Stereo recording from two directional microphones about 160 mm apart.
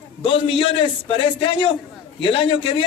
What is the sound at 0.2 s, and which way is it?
A man's voice, 35° left (ahead or behind).